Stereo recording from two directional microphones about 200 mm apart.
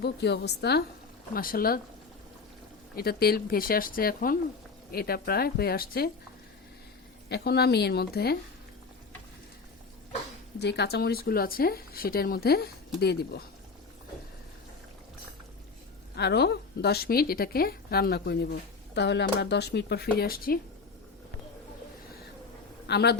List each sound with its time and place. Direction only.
0.0 s speech: 55° left (ahead or behind)
2.9 s speech: 50° left (ahead or behind)
7.3 s speech: 55° left (ahead or behind)
10.6 s speech: 55° left (ahead or behind)
16.1 s speech: 55° left (ahead or behind)
22.9 s a man's voice: 55° left (ahead or behind)